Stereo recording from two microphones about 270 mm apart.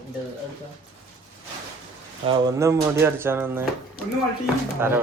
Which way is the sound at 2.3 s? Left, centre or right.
Centre.